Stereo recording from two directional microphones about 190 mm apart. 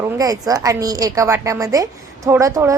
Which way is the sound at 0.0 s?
20° right (ahead or behind).